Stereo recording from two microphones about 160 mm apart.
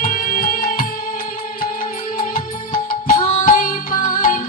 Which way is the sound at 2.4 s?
60° left (ahead or behind).